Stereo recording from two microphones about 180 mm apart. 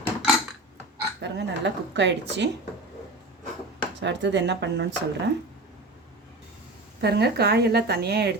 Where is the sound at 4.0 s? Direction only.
80° right.